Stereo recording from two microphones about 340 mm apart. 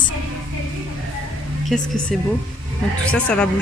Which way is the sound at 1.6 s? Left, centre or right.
Centre.